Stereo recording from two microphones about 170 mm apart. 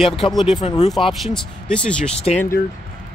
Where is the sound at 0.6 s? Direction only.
35° left (ahead or behind).